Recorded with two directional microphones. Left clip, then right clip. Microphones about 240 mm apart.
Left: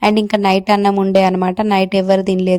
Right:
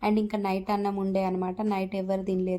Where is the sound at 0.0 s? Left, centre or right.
Left.